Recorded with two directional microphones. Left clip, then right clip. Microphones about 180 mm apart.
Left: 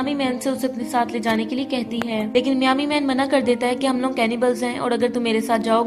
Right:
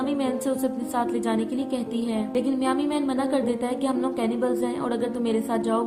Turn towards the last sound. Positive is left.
turn(degrees=15)  # may be behind; listen again after turning